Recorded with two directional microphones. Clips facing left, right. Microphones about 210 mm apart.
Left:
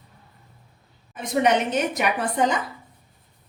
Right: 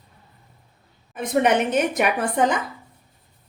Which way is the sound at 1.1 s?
55° right (ahead or behind).